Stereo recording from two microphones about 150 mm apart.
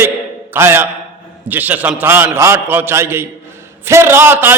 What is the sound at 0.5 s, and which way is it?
A man's voice, 15° right (ahead or behind).